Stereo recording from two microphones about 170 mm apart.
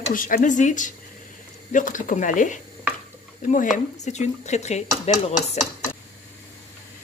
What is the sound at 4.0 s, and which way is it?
Speech, 40° left (ahead or behind).